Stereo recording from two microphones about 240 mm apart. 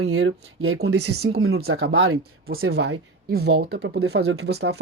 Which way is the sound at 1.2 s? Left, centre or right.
Right.